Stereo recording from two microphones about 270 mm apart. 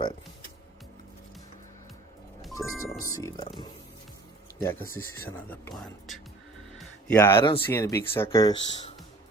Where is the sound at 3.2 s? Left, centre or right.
Centre.